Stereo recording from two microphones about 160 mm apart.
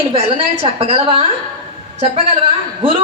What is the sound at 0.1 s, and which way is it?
A woman's voice, 35° right (ahead or behind).